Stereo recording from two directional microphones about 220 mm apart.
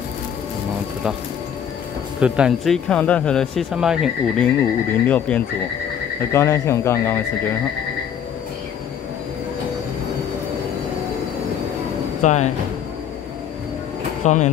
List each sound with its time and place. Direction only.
2.1 s speech: 5° right (ahead or behind); by 7.2 s 10° left (ahead or behind)
12.2 s speech: 30° left (ahead or behind)
14.2 s speech: 35° left (ahead or behind)